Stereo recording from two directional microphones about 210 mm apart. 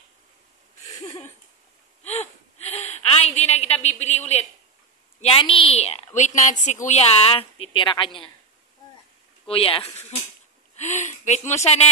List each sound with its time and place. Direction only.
2.8 s a sound: 30° left (ahead or behind)
5.2 s a woman's voice: 25° left (ahead or behind)
9.5 s a woman's voice: 25° left (ahead or behind)